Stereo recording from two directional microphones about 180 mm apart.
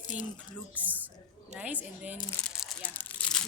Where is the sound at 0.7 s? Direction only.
10° right (ahead or behind).